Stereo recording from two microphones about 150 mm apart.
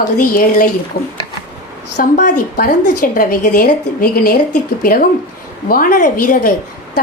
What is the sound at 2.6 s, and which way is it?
A woman's voice, 80° left.